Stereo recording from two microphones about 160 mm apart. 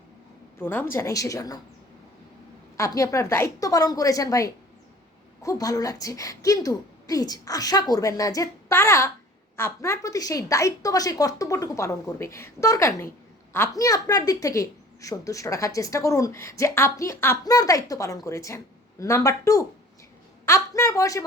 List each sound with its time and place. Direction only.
0.6 s a woman's voice: 10° left (ahead or behind)
2.7 s a woman's voice: 20° left (ahead or behind)